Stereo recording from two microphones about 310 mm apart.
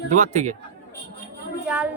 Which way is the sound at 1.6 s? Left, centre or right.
Centre.